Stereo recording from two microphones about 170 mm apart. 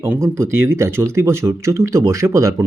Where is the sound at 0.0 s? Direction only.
15° right (ahead or behind).